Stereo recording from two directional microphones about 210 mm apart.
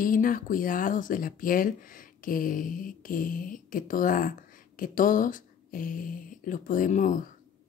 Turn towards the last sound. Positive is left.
turn(degrees=40)  # may be behind; listen again after turning